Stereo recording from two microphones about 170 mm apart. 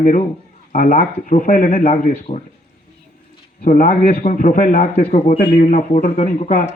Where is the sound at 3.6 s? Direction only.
40° left (ahead or behind).